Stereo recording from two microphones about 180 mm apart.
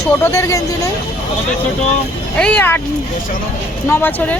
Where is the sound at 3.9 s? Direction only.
10° left (ahead or behind).